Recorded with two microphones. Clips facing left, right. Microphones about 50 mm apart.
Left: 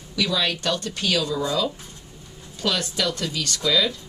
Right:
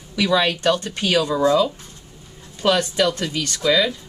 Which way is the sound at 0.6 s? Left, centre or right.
Right.